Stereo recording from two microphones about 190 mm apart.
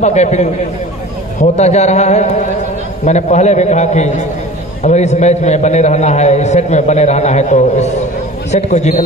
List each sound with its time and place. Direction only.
0.0 s a man's voice: 35° left (ahead or behind)